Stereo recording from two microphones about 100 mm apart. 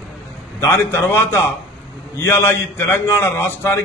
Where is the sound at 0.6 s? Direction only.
25° left (ahead or behind).